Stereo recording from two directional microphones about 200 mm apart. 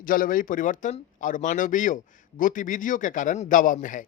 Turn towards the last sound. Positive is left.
turn(degrees=40)  # may be behind; listen again after turning